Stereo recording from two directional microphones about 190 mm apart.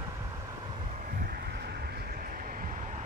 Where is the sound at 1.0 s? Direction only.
45° right (ahead or behind).